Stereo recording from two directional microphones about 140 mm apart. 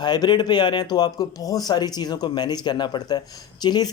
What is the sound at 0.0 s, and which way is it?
Speech, 30° left (ahead or behind).